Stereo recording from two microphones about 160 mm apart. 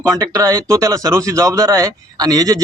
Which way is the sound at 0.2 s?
20° right (ahead or behind).